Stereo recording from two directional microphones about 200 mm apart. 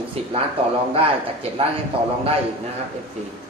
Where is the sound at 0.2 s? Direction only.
30° right (ahead or behind).